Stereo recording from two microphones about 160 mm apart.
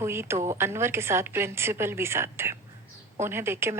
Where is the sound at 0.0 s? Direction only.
15° right (ahead or behind).